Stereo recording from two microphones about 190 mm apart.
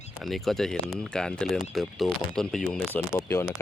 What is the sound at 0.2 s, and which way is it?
Speech, centre (ahead or behind).